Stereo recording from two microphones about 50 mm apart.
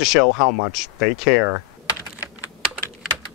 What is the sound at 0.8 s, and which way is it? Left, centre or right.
Speech, centre.